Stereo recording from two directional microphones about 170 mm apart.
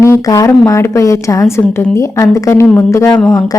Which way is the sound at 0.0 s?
20° left (ahead or behind).